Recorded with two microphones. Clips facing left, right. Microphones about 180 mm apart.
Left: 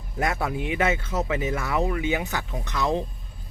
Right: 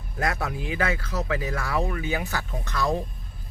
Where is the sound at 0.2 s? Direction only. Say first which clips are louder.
Left 2 dB; 25° left (ahead or behind).